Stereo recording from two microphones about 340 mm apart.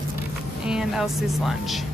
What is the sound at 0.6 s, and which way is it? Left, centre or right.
A woman's voice, centre.